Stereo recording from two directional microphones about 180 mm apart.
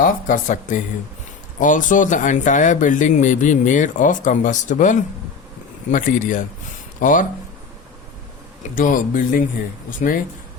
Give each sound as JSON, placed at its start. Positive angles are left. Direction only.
{"t": 0.0, "sound": "speech", "side_deg": 45}
{"t": 8.7, "sound": "speech", "side_deg": 50}